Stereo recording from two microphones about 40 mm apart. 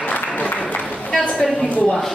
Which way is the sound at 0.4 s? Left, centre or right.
Left.